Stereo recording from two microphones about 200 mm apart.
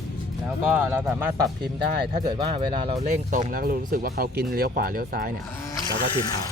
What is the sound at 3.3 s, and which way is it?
Speech, 40° right (ahead or behind).